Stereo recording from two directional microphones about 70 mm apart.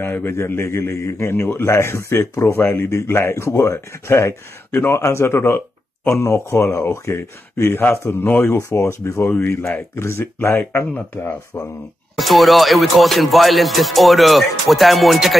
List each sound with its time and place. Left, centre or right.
0.0 s speech: left
12.2 s music: centre